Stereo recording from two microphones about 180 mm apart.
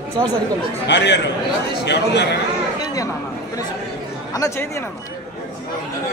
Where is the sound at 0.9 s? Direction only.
80° left.